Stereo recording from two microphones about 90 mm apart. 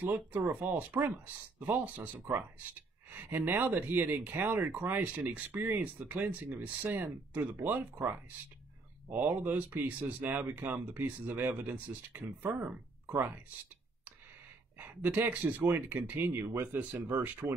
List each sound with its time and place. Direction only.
0.0 s speech: 20° right (ahead or behind)
14.8 s speech: 20° right (ahead or behind)